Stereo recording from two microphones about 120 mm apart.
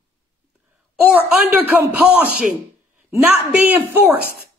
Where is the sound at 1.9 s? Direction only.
10° right (ahead or behind).